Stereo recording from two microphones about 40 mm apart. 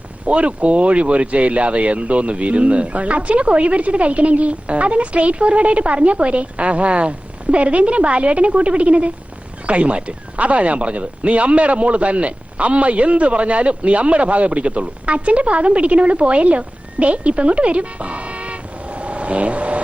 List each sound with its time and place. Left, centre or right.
0.3 s speech: right